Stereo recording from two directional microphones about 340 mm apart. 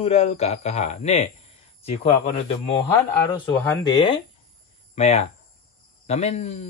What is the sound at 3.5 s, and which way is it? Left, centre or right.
Speech, centre.